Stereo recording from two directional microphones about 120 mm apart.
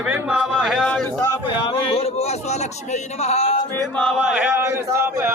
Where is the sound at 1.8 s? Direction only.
55° left (ahead or behind).